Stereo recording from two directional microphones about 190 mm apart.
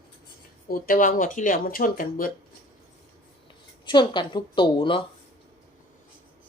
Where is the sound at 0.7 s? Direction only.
45° left (ahead or behind).